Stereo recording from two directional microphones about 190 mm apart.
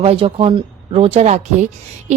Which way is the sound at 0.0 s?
30° right (ahead or behind).